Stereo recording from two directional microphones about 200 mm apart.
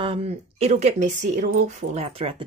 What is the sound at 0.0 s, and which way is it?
A woman's voice, 30° right (ahead or behind).